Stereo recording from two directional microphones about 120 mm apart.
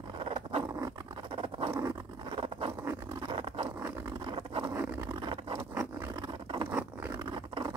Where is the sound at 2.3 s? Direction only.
50° right (ahead or behind).